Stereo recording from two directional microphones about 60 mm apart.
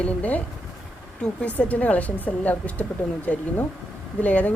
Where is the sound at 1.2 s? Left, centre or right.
Left.